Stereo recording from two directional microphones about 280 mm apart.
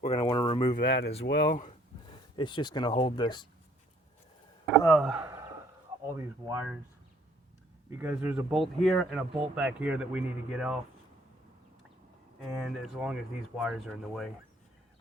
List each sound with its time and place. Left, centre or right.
0.0 s a sound: left
0.8 s speech: left
2.3 s speech: centre
4.8 s speech: centre
7.9 s speech: centre
12.4 s speech: centre